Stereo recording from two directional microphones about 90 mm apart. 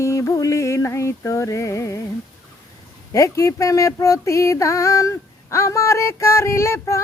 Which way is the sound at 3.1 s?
35° left (ahead or behind).